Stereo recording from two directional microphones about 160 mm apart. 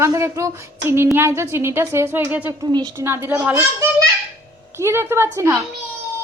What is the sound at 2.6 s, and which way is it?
Speech, 25° right (ahead or behind).